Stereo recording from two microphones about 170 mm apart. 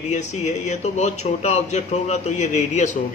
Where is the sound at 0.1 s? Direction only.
45° left (ahead or behind).